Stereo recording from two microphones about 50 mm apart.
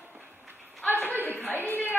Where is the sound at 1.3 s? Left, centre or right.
Left.